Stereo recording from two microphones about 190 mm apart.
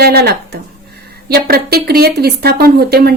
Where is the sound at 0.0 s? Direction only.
55° right (ahead or behind).